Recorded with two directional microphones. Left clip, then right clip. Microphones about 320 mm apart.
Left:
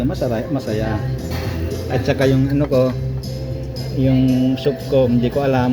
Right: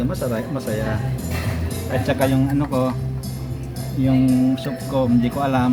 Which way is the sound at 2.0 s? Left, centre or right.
Centre.